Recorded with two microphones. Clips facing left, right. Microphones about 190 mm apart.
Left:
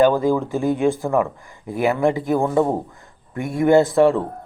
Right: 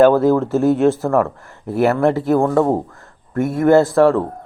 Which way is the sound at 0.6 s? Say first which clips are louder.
Right 5 dB; 5° right (ahead or behind).